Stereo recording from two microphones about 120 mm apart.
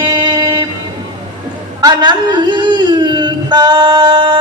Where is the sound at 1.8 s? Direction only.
35° right (ahead or behind).